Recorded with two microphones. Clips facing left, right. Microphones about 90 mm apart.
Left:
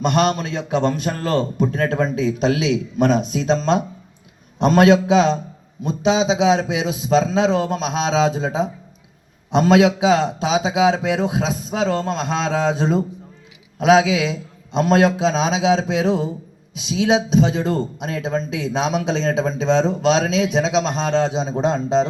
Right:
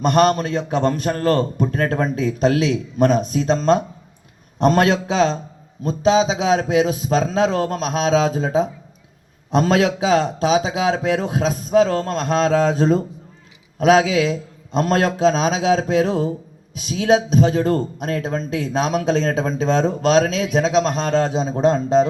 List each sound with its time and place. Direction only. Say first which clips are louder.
0.0 s a man's voice: right 3 dB; 45° right (ahead or behind)